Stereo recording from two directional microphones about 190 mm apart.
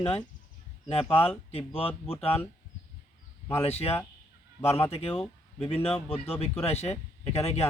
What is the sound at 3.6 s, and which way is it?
A man's voice, 30° left (ahead or behind).